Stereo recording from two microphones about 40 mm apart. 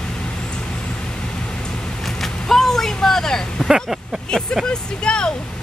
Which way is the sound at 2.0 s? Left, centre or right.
Centre.